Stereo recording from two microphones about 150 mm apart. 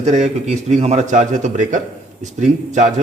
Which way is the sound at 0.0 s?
50° right (ahead or behind).